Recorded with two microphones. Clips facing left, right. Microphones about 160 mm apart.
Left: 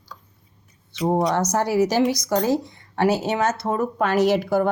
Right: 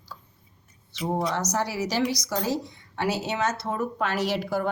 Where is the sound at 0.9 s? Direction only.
55° left (ahead or behind).